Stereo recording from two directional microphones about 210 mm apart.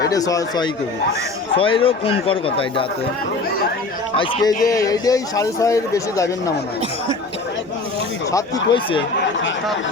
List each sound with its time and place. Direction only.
0.1 s a man's voice: 15° left (ahead or behind)
4.2 s a man's voice: 15° left (ahead or behind)
8.3 s speech: 20° left (ahead or behind)